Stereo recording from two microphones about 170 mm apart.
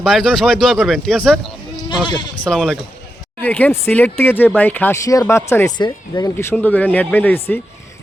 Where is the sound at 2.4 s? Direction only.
5° left (ahead or behind); by 6.4 s 20° left (ahead or behind).